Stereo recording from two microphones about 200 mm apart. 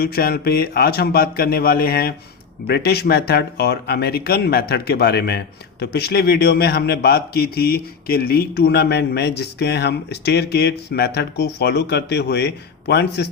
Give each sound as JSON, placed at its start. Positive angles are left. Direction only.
{"t": 0.0, "sound": "speech", "side_deg": 50}